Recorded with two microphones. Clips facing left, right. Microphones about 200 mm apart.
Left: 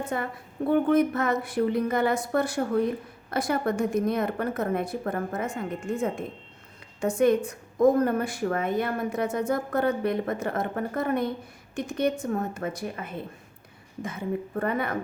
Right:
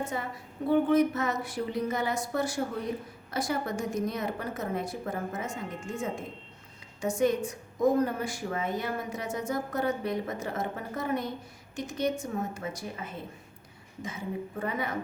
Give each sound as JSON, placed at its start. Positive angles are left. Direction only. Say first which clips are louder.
{"t": 0.1, "sound": "a woman's voice", "louder": "left 4 dB", "side_deg": 55}